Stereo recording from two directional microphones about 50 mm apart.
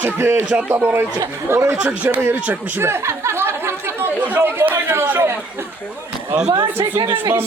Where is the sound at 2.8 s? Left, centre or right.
Right.